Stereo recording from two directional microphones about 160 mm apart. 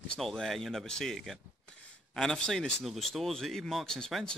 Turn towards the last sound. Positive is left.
turn(degrees=5)  # may be behind; listen again after turning